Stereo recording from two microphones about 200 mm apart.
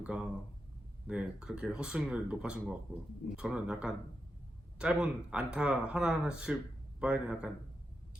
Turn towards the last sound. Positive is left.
turn(degrees=-5)  # may be behind; listen again after turning